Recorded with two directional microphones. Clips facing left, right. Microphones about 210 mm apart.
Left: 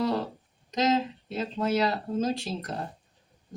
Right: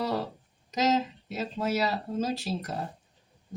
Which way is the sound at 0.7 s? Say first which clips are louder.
Left 1 dB; 5° right (ahead or behind).